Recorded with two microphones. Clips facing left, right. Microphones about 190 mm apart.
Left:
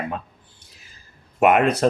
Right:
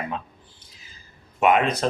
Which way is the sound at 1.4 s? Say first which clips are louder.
Left 3 dB; 55° left (ahead or behind).